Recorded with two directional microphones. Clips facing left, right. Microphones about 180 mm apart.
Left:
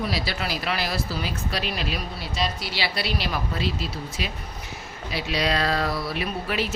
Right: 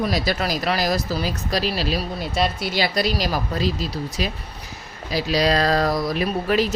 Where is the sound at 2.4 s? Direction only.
55° right (ahead or behind).